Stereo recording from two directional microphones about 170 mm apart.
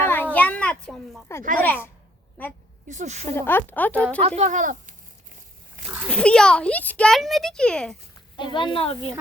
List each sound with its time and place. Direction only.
0.0 s a sound: 10° left (ahead or behind)
1.5 s a woman's voice: 10° left (ahead or behind)
2.9 s speech: 45° right (ahead or behind)
3.3 s a woman's voice: 10° left (ahead or behind)
4.2 s speech: 40° right (ahead or behind)
6.1 s a child's voice: 5° left (ahead or behind)
8.5 s speech: 30° left (ahead or behind)